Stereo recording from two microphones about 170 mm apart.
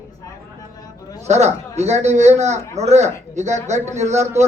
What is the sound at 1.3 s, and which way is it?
Speech, 40° right (ahead or behind).